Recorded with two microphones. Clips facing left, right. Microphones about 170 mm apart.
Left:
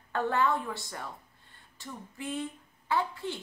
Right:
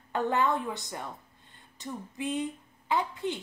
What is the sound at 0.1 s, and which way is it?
A woman's voice, 20° right (ahead or behind).